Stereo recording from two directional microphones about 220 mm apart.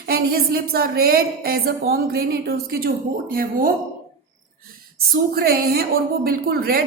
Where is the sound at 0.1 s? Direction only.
45° right (ahead or behind).